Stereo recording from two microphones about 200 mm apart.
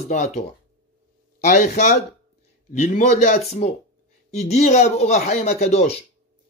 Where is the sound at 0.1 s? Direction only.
35° left (ahead or behind).